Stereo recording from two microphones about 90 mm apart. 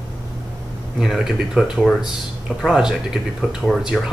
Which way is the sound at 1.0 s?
5° right (ahead or behind).